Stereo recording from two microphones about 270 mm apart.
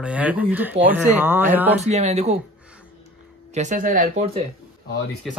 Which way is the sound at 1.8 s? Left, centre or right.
Right.